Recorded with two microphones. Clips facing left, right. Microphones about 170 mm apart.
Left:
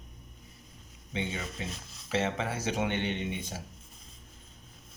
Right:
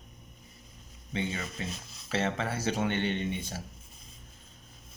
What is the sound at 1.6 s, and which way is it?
Speech, 20° left (ahead or behind).